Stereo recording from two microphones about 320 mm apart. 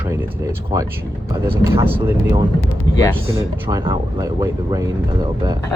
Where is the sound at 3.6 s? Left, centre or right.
Centre.